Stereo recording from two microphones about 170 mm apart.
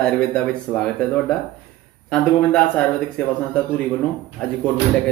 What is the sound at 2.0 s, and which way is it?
Speech, 5° left (ahead or behind).